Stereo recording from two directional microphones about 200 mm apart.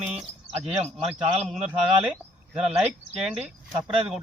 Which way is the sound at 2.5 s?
Centre (ahead or behind).